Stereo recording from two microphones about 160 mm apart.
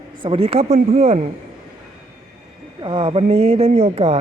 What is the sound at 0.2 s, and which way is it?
Speech, 35° right (ahead or behind).